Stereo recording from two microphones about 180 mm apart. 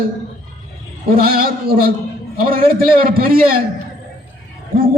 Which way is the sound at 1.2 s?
55° right (ahead or behind).